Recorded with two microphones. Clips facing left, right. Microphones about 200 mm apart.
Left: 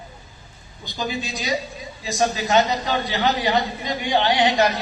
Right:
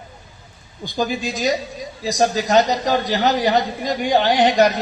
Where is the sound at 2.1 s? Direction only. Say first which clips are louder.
Right 3 dB; 40° right (ahead or behind).